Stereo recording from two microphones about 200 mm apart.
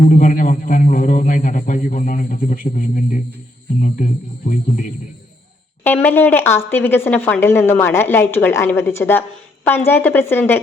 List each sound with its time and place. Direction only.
0.1 s a man's voice: 40° left (ahead or behind)
5.8 s a woman's voice: 10° left (ahead or behind)